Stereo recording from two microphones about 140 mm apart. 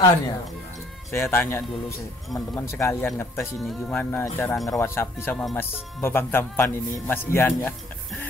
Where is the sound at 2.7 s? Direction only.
20° left (ahead or behind).